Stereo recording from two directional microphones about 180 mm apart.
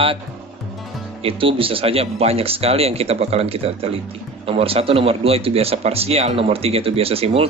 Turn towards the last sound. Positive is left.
turn(degrees=-35)  # may be behind; listen again after turning